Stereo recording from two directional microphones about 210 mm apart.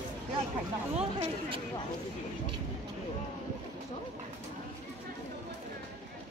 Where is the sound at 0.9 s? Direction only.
30° right (ahead or behind).